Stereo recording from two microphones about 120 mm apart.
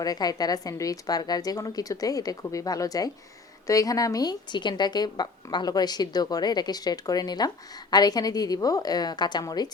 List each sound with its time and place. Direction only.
0.0 s a woman's voice: 30° left (ahead or behind)